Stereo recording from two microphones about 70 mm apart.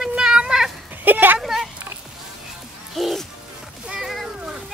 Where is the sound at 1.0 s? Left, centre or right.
Right.